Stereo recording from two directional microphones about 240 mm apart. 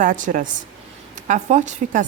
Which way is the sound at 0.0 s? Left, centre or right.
Right.